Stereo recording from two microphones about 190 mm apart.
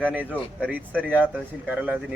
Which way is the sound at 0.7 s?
10° right (ahead or behind).